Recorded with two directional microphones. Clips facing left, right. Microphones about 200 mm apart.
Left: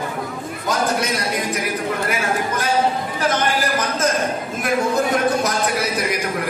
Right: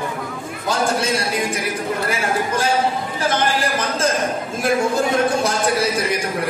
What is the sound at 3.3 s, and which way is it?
Speech, 30° right (ahead or behind).